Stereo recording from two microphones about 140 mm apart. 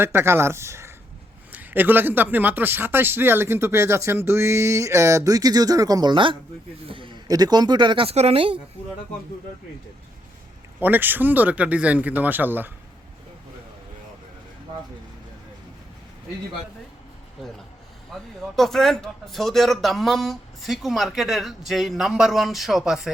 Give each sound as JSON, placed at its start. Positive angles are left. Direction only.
{"t": 0.0, "sound": "speech", "side_deg": -15}
{"t": 10.8, "sound": "speech", "side_deg": -15}
{"t": 18.1, "sound": "a sound", "side_deg": 0}
{"t": 18.5, "sound": "speech", "side_deg": 0}